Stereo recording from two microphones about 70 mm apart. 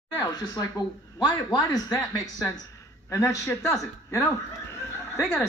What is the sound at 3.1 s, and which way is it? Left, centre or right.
A man's voice, left.